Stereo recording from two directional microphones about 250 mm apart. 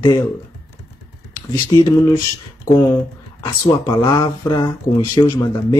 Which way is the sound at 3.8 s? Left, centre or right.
Centre.